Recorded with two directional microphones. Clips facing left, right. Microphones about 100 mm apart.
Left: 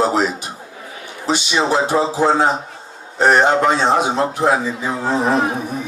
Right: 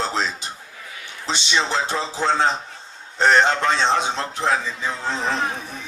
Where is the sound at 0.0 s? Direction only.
15° left (ahead or behind).